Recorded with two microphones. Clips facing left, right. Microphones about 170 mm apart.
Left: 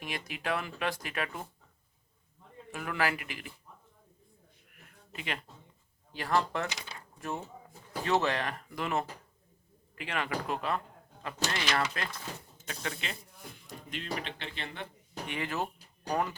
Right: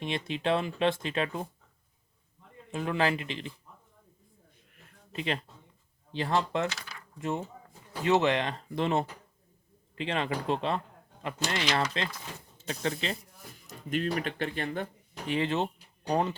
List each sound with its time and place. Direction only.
0.0 s speech: 25° right (ahead or behind)
2.7 s speech: 25° right (ahead or behind)
4.7 s a sound: 30° right (ahead or behind)
6.1 s speech: 25° right (ahead or behind)
6.7 s speech: 20° left (ahead or behind)
7.2 s speech: 20° right (ahead or behind)
13.7 s speech: 45° right (ahead or behind)
15.3 s speech: 25° right (ahead or behind)